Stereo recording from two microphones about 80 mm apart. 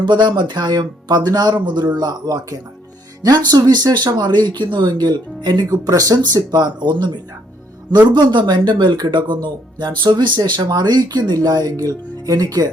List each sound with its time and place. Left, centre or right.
0.0 s speech: right
5.7 s speech: right